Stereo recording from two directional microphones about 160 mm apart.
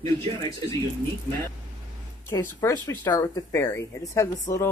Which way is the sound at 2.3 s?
15° left (ahead or behind).